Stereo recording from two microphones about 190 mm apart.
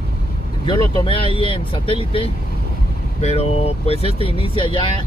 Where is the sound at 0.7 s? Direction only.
25° left (ahead or behind).